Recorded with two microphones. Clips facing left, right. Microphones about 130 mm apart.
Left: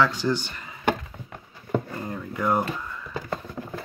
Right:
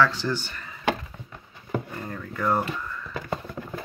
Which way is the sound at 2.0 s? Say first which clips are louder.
Left 1 dB; 15° left (ahead or behind).